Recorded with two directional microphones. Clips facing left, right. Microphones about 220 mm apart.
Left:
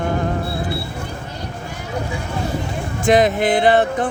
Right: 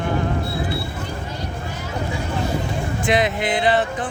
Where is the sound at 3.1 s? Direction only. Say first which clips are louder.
Left 6 dB; 45° left (ahead or behind).